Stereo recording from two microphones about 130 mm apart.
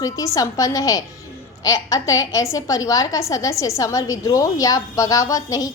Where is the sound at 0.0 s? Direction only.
25° left (ahead or behind).